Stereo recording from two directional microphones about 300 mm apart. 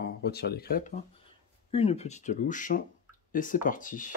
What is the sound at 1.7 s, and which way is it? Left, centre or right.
Speech, centre.